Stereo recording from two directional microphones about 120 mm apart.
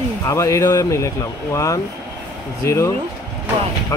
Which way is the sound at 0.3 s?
25° left (ahead or behind).